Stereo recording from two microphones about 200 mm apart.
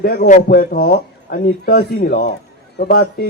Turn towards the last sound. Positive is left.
turn(degrees=50)  # may be behind; listen again after turning